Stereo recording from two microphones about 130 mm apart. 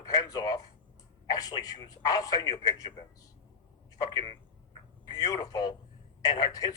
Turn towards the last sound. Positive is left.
turn(degrees=30)  # may be behind; listen again after turning